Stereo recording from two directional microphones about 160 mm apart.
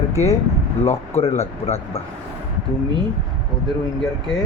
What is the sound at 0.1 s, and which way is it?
Speech, 20° left (ahead or behind).